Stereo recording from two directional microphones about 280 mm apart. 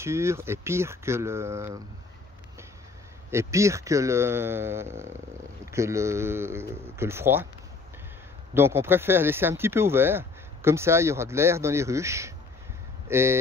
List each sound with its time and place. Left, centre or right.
0.0 s speech: centre
3.3 s speech: centre
8.5 s speech: centre